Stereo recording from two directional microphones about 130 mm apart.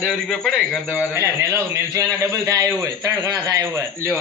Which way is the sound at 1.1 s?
20° right (ahead or behind).